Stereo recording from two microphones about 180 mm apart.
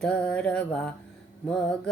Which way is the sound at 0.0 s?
5° left (ahead or behind).